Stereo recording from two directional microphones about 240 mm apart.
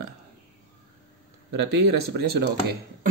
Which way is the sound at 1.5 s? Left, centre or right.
Right.